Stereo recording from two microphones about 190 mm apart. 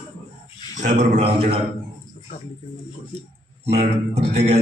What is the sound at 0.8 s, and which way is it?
Speech, 35° right (ahead or behind).